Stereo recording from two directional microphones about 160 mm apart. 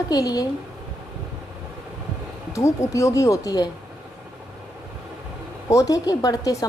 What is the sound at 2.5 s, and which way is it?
A woman's voice, 20° left (ahead or behind).